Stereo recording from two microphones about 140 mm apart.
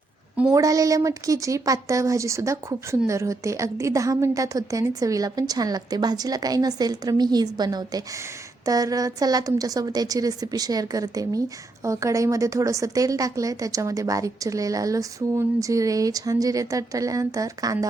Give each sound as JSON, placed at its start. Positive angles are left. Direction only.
{"t": 0.5, "sound": "a woman's voice", "side_deg": -25}